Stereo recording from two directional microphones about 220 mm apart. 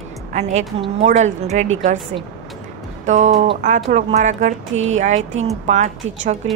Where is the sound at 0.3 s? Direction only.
30° right (ahead or behind).